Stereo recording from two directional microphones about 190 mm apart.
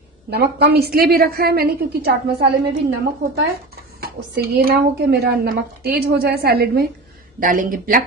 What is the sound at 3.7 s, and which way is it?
Speech, 55° right (ahead or behind).